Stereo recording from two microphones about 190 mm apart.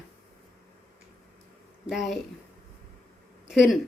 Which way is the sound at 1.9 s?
Centre (ahead or behind).